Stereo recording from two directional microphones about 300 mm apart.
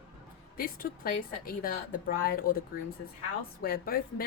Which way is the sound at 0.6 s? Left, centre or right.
Left.